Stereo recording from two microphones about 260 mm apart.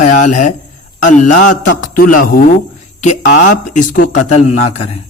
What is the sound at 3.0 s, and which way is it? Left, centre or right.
A man's voice, left.